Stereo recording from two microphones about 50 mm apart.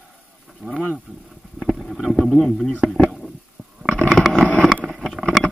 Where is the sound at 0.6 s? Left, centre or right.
Right.